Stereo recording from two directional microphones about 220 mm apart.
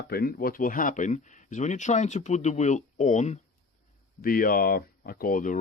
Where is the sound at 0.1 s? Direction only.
40° left (ahead or behind).